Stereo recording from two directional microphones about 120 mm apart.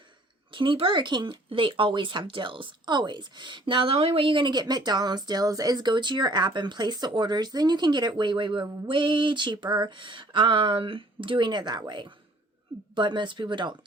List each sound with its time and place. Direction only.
0.5 s speech: 45° right (ahead or behind)